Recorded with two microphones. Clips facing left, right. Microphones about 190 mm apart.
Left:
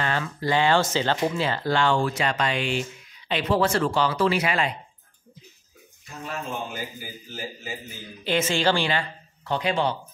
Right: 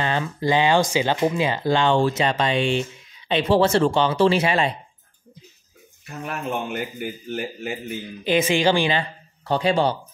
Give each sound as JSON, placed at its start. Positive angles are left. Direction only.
{"t": 0.0, "sound": "speech", "side_deg": -20}
{"t": 6.0, "sound": "a man's voice", "side_deg": -65}
{"t": 8.2, "sound": "speech", "side_deg": -15}
{"t": 9.4, "sound": "speech", "side_deg": -35}